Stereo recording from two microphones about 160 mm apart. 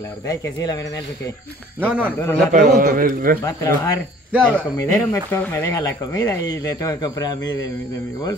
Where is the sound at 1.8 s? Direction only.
10° right (ahead or behind).